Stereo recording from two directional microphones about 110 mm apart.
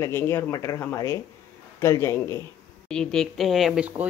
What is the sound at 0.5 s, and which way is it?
Speech, 30° left (ahead or behind).